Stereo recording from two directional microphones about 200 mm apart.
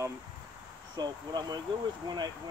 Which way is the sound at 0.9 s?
20° right (ahead or behind).